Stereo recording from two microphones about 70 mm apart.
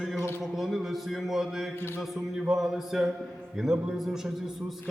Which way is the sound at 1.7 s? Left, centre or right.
Left.